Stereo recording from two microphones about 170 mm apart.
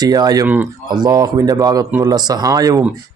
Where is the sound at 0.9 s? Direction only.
25° right (ahead or behind).